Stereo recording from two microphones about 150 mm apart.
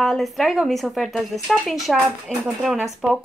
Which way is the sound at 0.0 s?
Centre (ahead or behind).